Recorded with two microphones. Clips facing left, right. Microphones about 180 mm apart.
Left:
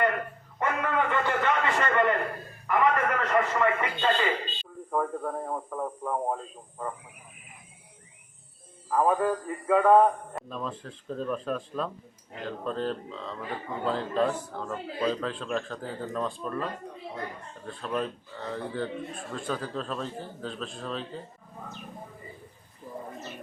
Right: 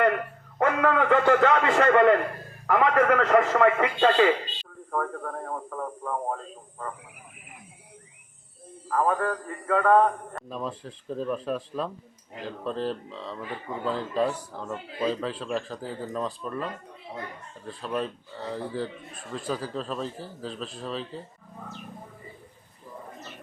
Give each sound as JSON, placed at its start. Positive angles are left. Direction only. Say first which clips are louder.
{"t": 0.6, "sound": "a sound", "louder": "right 5 dB", "side_deg": -90}
{"t": 2.6, "sound": "a man's voice", "louder": "right 4 dB", "side_deg": -85}
{"t": 4.9, "sound": "a man's voice", "louder": "left 1 dB", "side_deg": 15}
{"t": 8.9, "sound": "a man's voice", "louder": "left 1 dB", "side_deg": 15}
{"t": 10.5, "sound": "a man's voice", "louder": "right 4 dB", "side_deg": -5}
{"t": 17.7, "sound": "a man's voice", "louder": "right 1 dB", "side_deg": -5}